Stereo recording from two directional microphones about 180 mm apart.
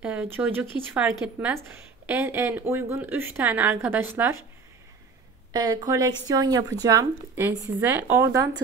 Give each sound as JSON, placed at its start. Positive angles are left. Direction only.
{"t": 0.0, "sound": "a woman's voice", "side_deg": -5}
{"t": 5.5, "sound": "a woman's voice", "side_deg": -20}